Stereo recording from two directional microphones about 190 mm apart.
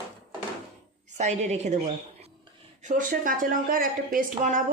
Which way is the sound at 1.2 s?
35° right (ahead or behind).